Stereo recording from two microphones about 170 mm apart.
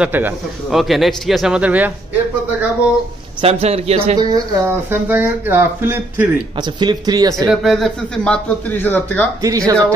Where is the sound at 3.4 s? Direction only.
35° right (ahead or behind).